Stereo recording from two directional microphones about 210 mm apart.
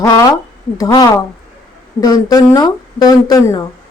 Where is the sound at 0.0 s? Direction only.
15° left (ahead or behind).